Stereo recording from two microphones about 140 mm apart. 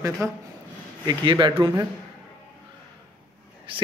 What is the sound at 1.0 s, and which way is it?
Speech, 35° right (ahead or behind).